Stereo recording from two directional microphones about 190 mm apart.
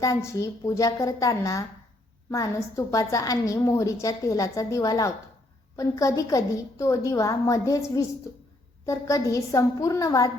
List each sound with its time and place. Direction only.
0.0 s a woman's voice: 15° left (ahead or behind)